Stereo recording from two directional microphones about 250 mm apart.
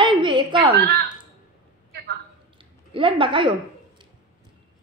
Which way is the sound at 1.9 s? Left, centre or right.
Right.